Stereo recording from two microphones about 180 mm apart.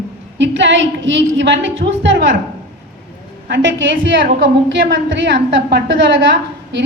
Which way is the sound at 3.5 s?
90° right.